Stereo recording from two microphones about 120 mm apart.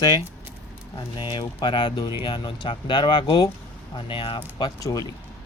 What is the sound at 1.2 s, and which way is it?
Speech, 40° left (ahead or behind).